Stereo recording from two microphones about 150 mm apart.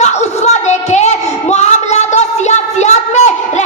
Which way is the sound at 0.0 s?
50° left (ahead or behind).